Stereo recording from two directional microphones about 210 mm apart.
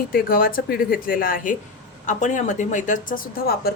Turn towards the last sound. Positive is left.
turn(degrees=45)  # may be behind; listen again after turning